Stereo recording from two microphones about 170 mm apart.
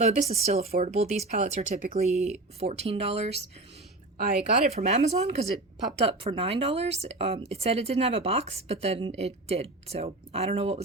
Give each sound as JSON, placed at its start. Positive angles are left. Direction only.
{"t": 0.0, "sound": "speech", "side_deg": -40}
{"t": 4.7, "sound": "speech", "side_deg": -40}